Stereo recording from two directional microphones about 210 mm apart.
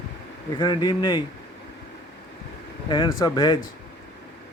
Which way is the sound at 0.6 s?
20° left (ahead or behind).